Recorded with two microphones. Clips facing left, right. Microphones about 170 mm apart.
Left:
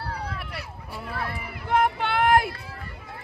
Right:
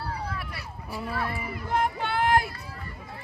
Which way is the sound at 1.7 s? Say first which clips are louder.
Left 4 dB; 65° left (ahead or behind).